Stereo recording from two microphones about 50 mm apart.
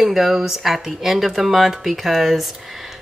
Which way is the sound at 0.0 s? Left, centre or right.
Centre.